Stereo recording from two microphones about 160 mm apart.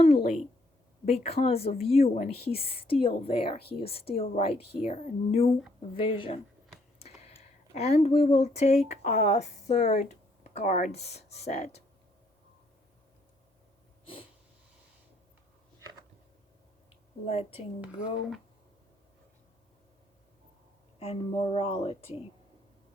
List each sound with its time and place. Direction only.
1.0 s speech: 40° left (ahead or behind)
3.1 s a woman's voice: 70° left (ahead or behind)
3.8 s speech: 35° left (ahead or behind)
7.8 s speech: 40° left (ahead or behind)
17.5 s speech: 10° right (ahead or behind)
21.0 s speech: 40° left (ahead or behind)